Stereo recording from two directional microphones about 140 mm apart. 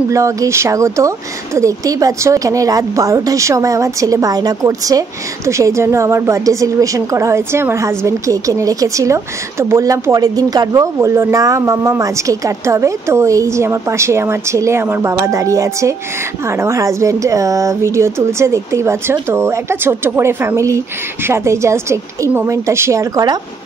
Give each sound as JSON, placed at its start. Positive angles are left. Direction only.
{"t": 0.1, "sound": "speech", "side_deg": -20}